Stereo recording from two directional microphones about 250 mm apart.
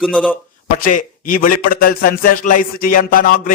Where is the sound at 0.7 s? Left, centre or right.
Left.